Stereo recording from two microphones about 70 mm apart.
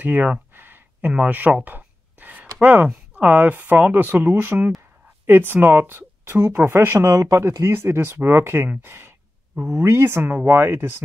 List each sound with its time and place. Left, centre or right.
0.0 s a sound: right
2.6 s speech: right
7.0 s speech: right
7.6 s speech: right